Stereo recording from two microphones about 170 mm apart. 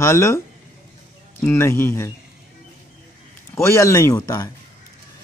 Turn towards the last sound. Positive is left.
turn(degrees=20)  # may be behind; listen again after turning